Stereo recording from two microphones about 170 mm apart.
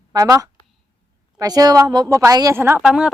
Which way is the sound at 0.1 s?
20° right (ahead or behind).